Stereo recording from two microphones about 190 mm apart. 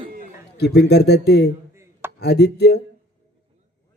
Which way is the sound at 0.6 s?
60° left (ahead or behind).